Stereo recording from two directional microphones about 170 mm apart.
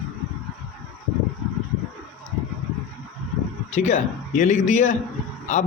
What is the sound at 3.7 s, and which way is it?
A man's voice, 45° left (ahead or behind).